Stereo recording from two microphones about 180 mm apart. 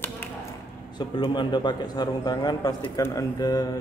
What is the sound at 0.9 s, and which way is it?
A man's voice, 25° left (ahead or behind).